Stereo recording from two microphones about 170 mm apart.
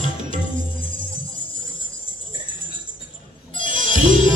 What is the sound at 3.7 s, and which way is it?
Music, 50° right (ahead or behind).